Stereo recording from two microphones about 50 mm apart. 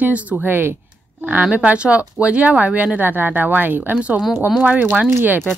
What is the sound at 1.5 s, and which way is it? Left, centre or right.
Speech, right.